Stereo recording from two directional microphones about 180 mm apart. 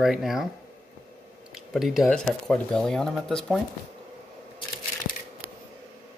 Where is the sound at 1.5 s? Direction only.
Centre (ahead or behind).